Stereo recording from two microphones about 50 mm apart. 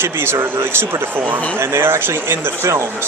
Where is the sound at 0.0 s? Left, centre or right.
Right.